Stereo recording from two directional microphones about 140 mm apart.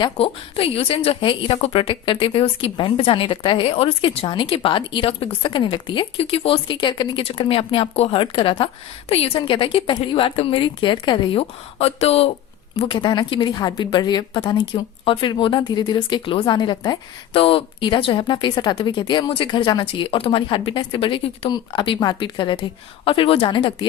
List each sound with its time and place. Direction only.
0.0 s a woman's voice: 40° left (ahead or behind)